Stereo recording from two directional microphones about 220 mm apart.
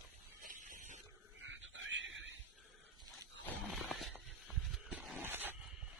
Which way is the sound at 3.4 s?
Centre (ahead or behind).